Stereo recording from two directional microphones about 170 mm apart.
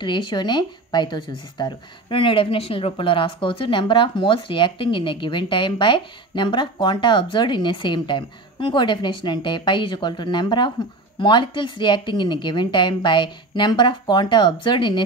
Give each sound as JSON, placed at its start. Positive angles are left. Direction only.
{"t": 0.0, "sound": "speech", "side_deg": 25}